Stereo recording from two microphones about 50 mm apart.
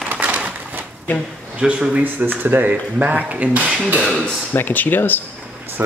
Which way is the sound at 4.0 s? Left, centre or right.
Centre.